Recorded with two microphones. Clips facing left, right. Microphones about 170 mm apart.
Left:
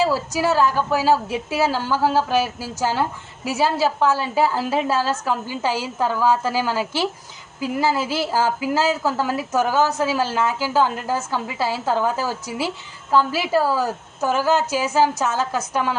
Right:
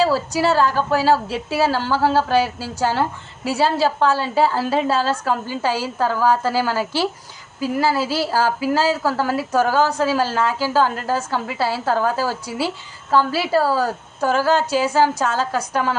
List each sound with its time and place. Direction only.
0.0 s a woman's voice: 15° left (ahead or behind)